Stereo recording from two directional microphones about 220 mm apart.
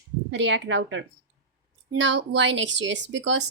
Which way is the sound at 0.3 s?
55° right (ahead or behind).